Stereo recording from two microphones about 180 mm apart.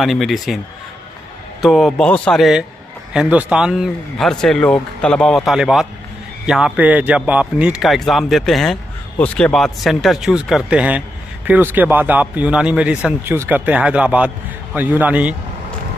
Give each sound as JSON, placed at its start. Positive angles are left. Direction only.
{"t": 0.0, "sound": "a man's voice", "side_deg": 0}
{"t": 1.6, "sound": "a man's voice", "side_deg": 0}